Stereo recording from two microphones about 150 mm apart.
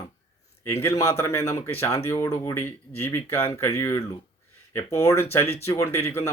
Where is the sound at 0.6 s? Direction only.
20° left (ahead or behind).